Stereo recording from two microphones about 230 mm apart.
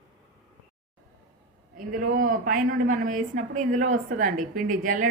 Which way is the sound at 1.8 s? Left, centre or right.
Right.